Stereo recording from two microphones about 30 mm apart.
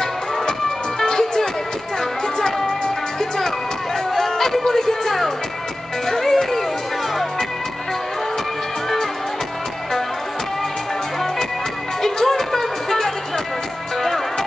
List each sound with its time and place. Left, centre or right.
0.0 s music: centre
3.2 s music: centre
12.0 s music: centre